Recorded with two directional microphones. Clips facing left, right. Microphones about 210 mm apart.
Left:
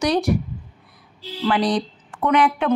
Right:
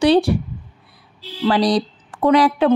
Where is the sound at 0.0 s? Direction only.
30° right (ahead or behind).